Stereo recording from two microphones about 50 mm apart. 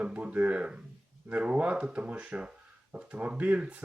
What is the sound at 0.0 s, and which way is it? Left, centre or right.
Speech, right.